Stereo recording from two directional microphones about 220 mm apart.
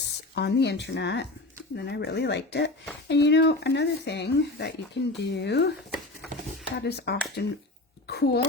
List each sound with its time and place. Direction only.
0.3 s speech: 50° left (ahead or behind)
6.7 s a woman's voice: 50° left (ahead or behind)